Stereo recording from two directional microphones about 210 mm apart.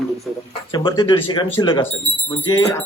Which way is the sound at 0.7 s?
20° left (ahead or behind).